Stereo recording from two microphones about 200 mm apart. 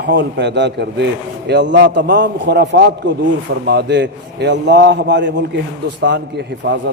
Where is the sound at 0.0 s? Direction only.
60° right (ahead or behind).